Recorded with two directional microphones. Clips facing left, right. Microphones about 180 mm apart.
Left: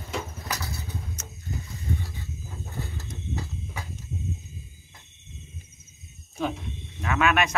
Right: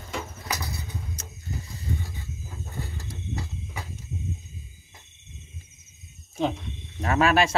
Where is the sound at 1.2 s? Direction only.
35° right (ahead or behind).